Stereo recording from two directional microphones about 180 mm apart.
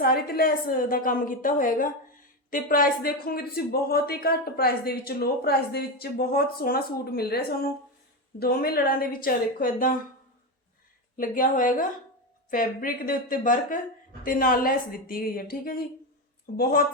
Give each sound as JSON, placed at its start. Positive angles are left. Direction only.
{"t": 0.0, "sound": "a woman's voice", "side_deg": 55}
{"t": 11.2, "sound": "a woman's voice", "side_deg": 50}